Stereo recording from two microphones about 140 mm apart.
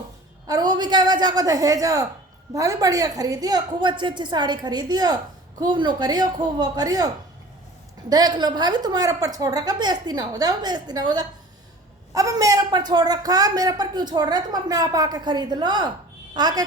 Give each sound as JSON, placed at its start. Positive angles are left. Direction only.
{"t": 0.4, "sound": "a woman's voice", "side_deg": -30}
{"t": 8.1, "sound": "speech", "side_deg": -30}